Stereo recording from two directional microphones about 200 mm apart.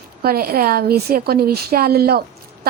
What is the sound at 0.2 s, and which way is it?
A woman's voice, 50° right (ahead or behind).